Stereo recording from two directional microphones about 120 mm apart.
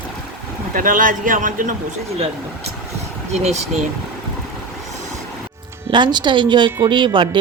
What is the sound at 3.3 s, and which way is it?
Speech, 65° right (ahead or behind).